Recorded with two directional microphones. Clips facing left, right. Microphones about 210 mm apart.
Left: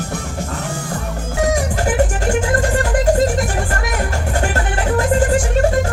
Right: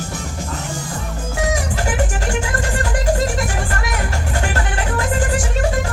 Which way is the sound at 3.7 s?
40° left (ahead or behind).